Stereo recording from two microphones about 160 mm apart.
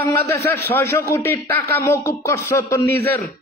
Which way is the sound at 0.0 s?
15° left (ahead or behind).